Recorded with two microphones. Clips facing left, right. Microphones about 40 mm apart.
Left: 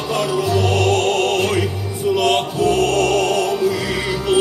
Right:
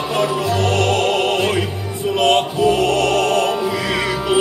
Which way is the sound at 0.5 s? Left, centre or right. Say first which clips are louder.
Left 1 dB; right.